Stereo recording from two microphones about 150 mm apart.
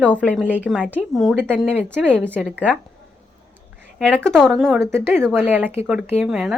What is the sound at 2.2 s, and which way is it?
Speech, 15° right (ahead or behind).